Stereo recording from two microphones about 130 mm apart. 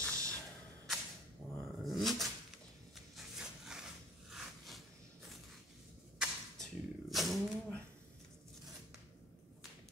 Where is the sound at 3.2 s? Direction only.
5° right (ahead or behind).